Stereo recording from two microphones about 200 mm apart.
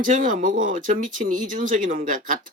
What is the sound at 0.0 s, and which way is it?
Speech, 40° right (ahead or behind).